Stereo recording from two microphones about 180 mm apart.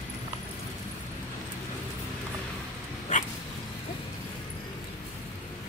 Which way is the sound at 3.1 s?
45° left (ahead or behind).